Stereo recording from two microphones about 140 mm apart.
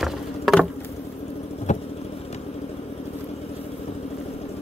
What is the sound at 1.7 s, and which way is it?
Vehicle, 55° left (ahead or behind).